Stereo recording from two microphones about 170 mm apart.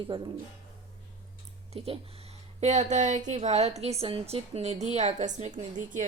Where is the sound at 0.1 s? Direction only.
30° right (ahead or behind).